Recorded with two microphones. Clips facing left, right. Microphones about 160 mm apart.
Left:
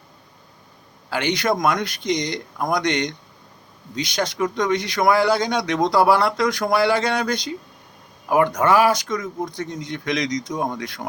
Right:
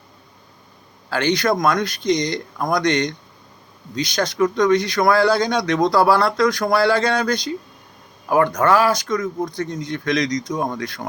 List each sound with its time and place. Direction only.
1.1 s speech: 20° left (ahead or behind)